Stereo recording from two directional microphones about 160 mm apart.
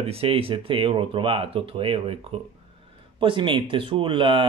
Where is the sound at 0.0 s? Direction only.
35° right (ahead or behind).